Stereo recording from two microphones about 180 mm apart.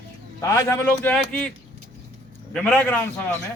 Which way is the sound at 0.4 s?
15° left (ahead or behind).